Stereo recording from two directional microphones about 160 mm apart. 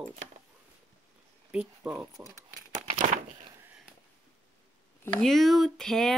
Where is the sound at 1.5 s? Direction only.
5° right (ahead or behind).